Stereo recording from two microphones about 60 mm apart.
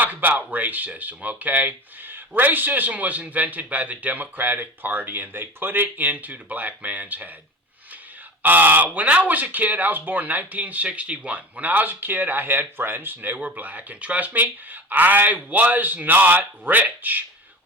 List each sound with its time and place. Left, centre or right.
0.0 s speech: right
8.4 s speech: right